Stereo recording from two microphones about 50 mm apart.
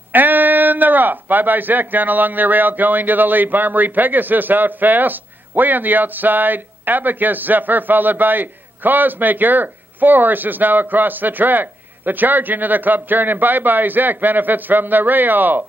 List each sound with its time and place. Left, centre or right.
0.1 s speech: right